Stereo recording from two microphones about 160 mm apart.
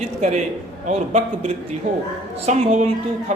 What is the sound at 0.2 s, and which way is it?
A man's voice, 45° right (ahead or behind).